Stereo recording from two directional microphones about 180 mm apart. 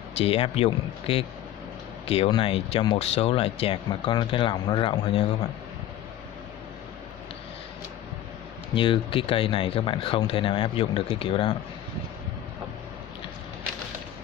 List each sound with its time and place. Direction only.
0.2 s speech: 35° left (ahead or behind)
8.7 s speech: 30° left (ahead or behind)